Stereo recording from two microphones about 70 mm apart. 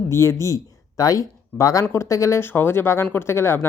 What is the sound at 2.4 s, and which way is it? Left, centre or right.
Speech, left.